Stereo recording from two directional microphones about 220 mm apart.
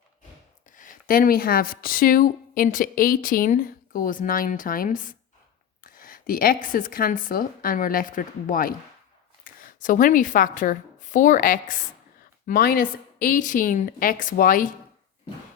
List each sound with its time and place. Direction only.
0.8 s a woman's voice: 40° left (ahead or behind)